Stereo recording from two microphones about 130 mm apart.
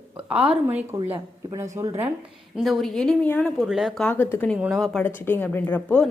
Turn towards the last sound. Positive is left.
turn(degrees=10)  # may be behind; listen again after turning